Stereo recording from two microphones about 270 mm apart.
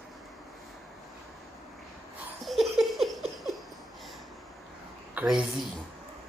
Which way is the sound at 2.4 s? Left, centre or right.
Centre.